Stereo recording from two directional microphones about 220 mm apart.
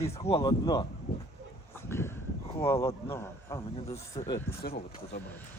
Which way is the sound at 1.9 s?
10° left (ahead or behind).